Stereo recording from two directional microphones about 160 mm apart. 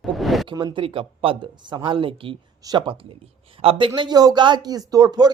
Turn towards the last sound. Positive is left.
turn(degrees=-25)  # may be behind; listen again after turning